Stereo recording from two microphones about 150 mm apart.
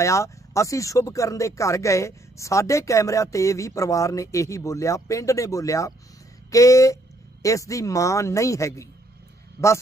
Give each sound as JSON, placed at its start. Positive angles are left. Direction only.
{"t": 0.0, "sound": "speech", "side_deg": 20}